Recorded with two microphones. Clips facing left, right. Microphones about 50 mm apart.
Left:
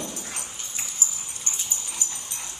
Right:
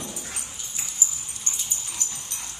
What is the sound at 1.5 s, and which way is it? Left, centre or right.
Dog, left.